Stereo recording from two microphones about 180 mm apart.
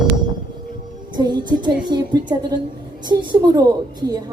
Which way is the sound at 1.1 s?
25° right (ahead or behind).